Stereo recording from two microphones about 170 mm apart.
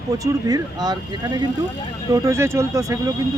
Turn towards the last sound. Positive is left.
turn(degrees=-20)  # may be behind; listen again after turning